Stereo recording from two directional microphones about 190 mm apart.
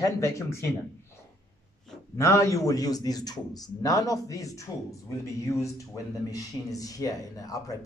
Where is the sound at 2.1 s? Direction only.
15° left (ahead or behind).